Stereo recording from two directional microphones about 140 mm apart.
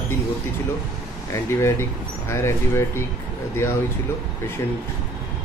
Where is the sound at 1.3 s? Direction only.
20° left (ahead or behind).